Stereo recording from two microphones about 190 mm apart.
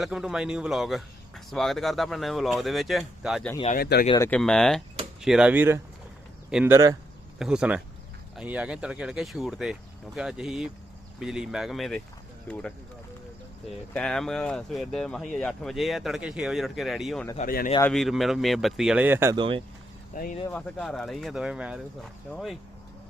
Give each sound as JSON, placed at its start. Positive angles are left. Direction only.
{"t": 0.0, "sound": "speech", "side_deg": 0}
{"t": 3.8, "sound": "speech", "side_deg": 55}
{"t": 4.2, "sound": "speech", "side_deg": 5}
{"t": 13.9, "sound": "speech", "side_deg": 5}
{"t": 17.3, "sound": "speech", "side_deg": 45}
{"t": 17.9, "sound": "speech", "side_deg": 0}
{"t": 19.4, "sound": "speech", "side_deg": -25}
{"t": 20.1, "sound": "speech", "side_deg": 45}
{"t": 20.5, "sound": "speech", "side_deg": 5}